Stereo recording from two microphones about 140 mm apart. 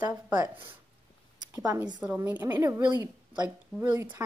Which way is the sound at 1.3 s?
25° right (ahead or behind).